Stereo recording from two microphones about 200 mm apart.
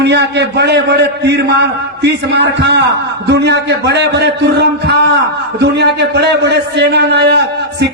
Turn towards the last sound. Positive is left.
turn(degrees=-55)  # may be behind; listen again after turning